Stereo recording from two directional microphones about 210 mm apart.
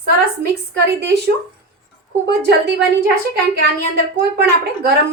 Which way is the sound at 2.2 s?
55° right (ahead or behind).